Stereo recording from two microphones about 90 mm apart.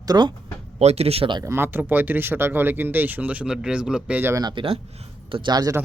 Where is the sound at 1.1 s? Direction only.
75° right (ahead or behind).